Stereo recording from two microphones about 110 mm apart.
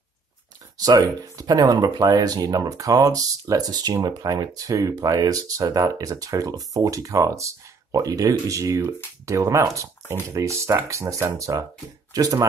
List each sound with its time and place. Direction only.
0.7 s speech: 35° right (ahead or behind)